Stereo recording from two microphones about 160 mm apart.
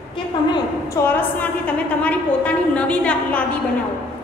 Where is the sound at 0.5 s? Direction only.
15° left (ahead or behind).